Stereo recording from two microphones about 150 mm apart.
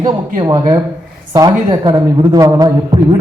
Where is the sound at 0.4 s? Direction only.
25° right (ahead or behind).